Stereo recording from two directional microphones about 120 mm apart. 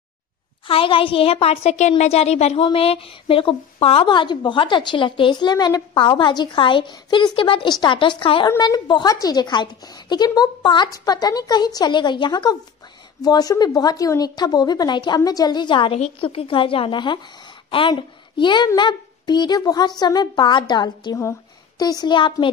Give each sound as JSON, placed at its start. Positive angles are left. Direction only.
{"t": 0.7, "sound": "a woman's voice", "side_deg": 50}
{"t": 2.6, "sound": "a woman's voice", "side_deg": 50}
{"t": 8.5, "sound": "a woman's voice", "side_deg": 35}